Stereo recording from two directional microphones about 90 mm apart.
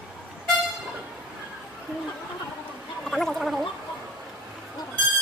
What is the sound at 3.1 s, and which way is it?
Gargling, 5° left (ahead or behind).